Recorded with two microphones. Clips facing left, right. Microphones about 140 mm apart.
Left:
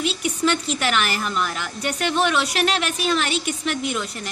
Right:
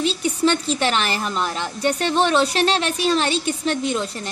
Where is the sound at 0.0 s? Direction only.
35° right (ahead or behind).